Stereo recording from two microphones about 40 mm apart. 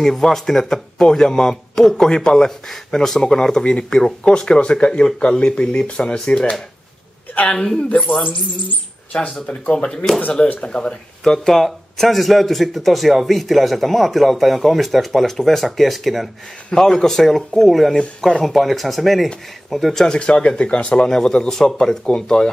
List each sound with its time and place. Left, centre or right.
0.0 s speech: centre
9.5 s speech: left
9.8 s speech: centre
10.3 s speech: left
11.2 s speech: centre
16.7 s speech: centre
20.1 s speech: left